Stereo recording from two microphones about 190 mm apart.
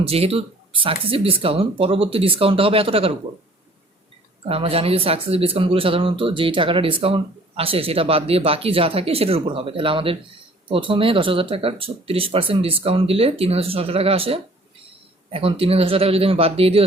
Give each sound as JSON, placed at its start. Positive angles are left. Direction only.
{"t": 0.0, "sound": "speech", "side_deg": -30}
{"t": 4.4, "sound": "speech", "side_deg": -30}